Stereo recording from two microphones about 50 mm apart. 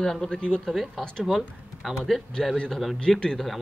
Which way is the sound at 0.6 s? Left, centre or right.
Centre.